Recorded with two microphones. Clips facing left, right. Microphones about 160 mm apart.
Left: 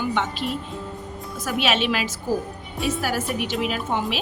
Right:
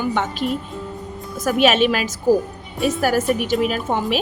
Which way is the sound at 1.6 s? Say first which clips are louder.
Right 7 dB; 45° right (ahead or behind).